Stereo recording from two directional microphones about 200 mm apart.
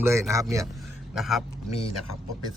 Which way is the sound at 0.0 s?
15° right (ahead or behind).